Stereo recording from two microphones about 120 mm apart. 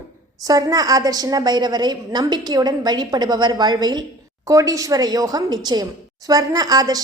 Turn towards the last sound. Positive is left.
turn(degrees=-30)  # may be behind; listen again after turning